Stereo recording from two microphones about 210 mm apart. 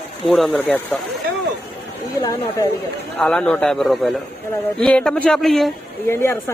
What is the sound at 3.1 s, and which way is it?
Speech, 5° left (ahead or behind).